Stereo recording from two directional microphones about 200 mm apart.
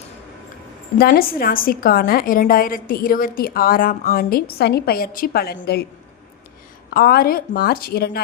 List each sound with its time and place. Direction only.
0.9 s a woman's voice: 50° left (ahead or behind)
6.9 s a woman's voice: 50° left (ahead or behind)